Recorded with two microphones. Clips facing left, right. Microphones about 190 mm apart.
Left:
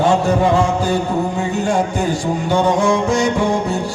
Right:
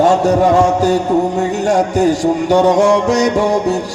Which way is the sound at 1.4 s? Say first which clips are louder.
Right 4 dB; 40° right (ahead or behind).